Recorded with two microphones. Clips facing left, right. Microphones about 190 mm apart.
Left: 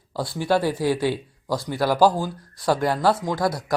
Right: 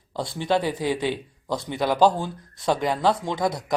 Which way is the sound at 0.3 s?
10° left (ahead or behind).